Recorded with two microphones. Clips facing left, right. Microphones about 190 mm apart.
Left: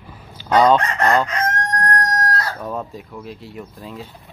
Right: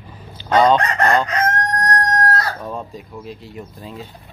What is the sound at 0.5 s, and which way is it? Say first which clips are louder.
Chicken: even; 5° left (ahead or behind).